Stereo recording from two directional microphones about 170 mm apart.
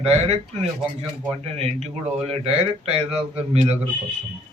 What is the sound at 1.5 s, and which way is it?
Speech, 40° right (ahead or behind).